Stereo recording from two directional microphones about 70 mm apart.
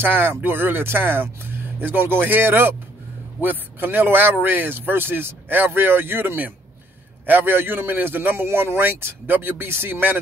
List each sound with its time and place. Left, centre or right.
0.0 s speech: right